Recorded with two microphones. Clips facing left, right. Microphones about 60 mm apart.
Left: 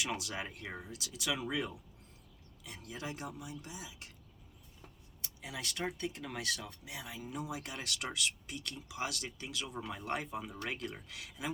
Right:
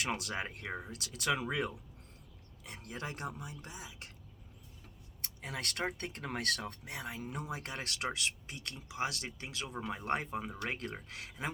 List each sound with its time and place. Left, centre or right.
0.0 s speech: right
5.2 s vehicle: right
5.8 s speech: right